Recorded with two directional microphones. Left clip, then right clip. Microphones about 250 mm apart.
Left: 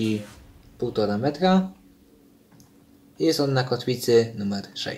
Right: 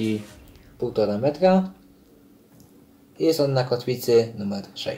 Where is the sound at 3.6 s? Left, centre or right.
Left.